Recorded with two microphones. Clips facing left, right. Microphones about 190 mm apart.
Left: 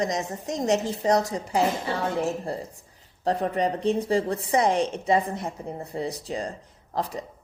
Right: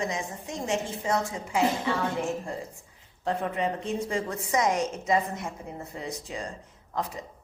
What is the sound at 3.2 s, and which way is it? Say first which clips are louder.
A woman's voice: left 4 dB; 35° left (ahead or behind).